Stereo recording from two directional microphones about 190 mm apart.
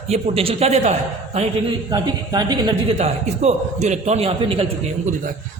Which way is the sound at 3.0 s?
35° right (ahead or behind).